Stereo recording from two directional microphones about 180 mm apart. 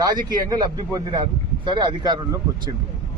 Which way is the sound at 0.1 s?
20° right (ahead or behind).